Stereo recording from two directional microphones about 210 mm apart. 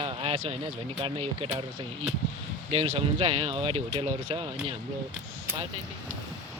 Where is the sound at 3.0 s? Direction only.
25° right (ahead or behind).